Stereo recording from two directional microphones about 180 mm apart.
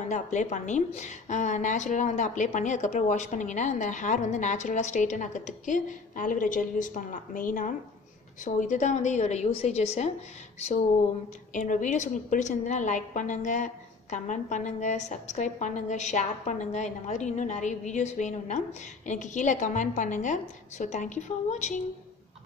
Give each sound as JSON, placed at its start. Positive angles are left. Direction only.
{"t": 0.1, "sound": "a woman's voice", "side_deg": 45}
{"t": 11.5, "sound": "a woman's voice", "side_deg": 45}